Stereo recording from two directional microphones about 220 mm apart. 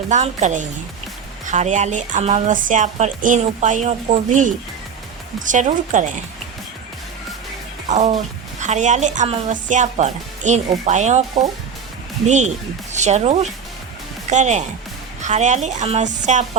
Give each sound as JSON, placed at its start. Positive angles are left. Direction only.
{"t": 0.1, "sound": "speech", "side_deg": -30}
{"t": 7.9, "sound": "music", "side_deg": -30}
{"t": 8.6, "sound": "speech", "side_deg": -35}